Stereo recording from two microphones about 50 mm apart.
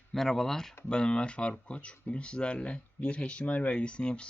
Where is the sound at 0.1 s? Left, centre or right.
Centre.